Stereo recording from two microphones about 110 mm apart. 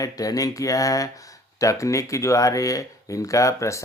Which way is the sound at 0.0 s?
35° left (ahead or behind).